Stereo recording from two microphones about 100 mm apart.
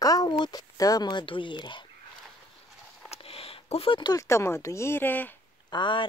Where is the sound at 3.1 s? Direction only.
80° left.